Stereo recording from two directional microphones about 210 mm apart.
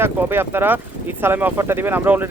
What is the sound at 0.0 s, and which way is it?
Speech, 10° right (ahead or behind).